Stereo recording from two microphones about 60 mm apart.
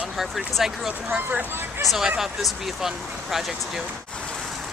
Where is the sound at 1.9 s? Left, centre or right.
Centre.